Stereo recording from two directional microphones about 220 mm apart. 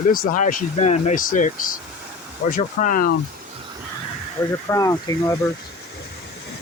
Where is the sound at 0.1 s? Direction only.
40° left (ahead or behind).